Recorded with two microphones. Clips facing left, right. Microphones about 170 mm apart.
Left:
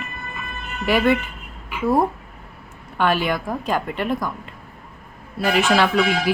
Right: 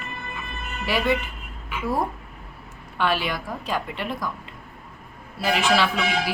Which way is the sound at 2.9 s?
50° left (ahead or behind).